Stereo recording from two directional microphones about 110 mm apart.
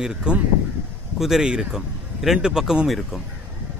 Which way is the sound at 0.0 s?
5° right (ahead or behind).